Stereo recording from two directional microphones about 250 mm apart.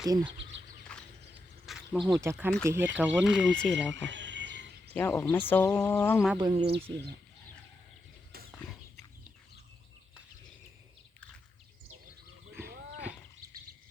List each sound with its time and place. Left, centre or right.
0.0 s speech: centre
0.9 s a sound: centre
2.2 s speech: centre
4.1 s a sound: right
4.9 s speech: centre
6.3 s speech: centre
12.6 s horse: right